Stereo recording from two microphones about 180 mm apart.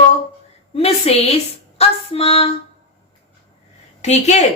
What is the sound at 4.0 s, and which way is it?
Female singing, 40° left (ahead or behind).